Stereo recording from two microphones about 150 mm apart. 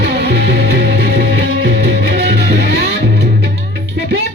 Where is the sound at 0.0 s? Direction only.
90° right.